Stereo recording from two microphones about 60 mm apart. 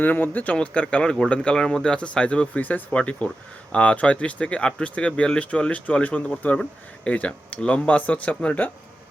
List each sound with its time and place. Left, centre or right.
0.0 s speech: left; by 2.5 s centre
2.6 s speech: left